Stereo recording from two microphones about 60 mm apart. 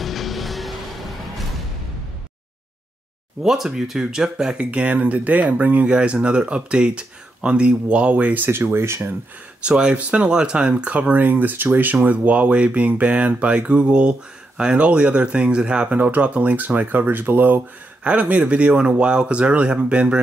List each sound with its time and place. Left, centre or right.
0.0 s music: centre
3.4 s speech: centre; by 8.5 s right
8.5 s speech: right
9.6 s speech: centre